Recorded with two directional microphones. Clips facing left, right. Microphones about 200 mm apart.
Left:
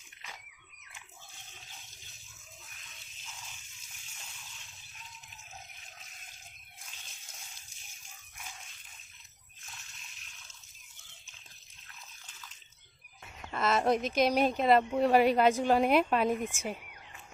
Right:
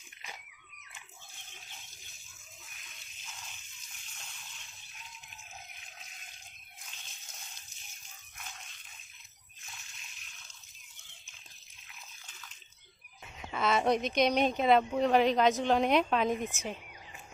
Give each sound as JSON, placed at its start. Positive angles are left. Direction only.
{"t": 13.4, "sound": "speech", "side_deg": 0}